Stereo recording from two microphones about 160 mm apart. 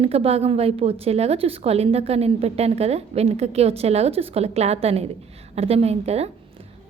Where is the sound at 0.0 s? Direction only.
40° right (ahead or behind).